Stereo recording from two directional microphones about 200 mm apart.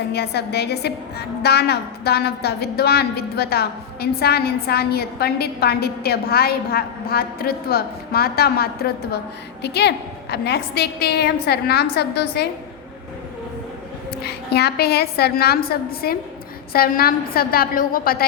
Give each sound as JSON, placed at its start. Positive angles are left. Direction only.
{"t": 0.1, "sound": "a woman's voice", "side_deg": 55}
{"t": 14.3, "sound": "a woman's voice", "side_deg": 55}